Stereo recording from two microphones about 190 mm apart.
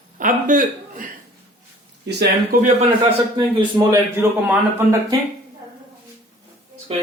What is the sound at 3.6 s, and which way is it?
Speech, 20° right (ahead or behind).